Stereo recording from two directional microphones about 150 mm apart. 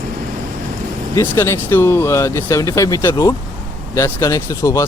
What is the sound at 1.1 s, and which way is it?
Speech, 15° left (ahead or behind).